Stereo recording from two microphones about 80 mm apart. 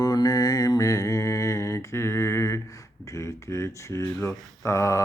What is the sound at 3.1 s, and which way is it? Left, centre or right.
Speech, left.